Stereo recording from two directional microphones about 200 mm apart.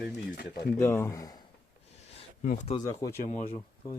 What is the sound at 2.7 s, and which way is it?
Speech, 15° left (ahead or behind).